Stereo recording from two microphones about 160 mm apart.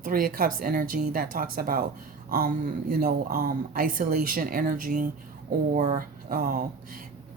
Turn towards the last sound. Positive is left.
turn(degrees=-65)  # may be behind; listen again after turning